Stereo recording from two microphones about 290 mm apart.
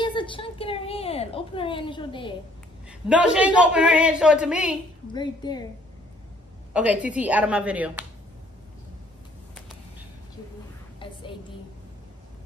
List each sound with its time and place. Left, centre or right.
0.0 s a child's voice: centre
2.9 s a man's voice: centre
5.1 s a woman's voice: centre
6.7 s a man's voice: centre